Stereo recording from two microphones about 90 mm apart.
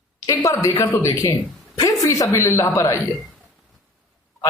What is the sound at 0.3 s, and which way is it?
A woman's voice, 35° left (ahead or behind).